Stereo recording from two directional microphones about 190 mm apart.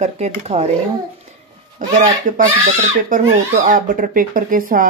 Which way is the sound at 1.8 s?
45° right (ahead or behind).